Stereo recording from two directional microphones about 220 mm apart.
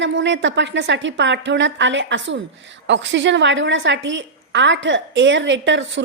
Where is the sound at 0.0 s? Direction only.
55° right (ahead or behind).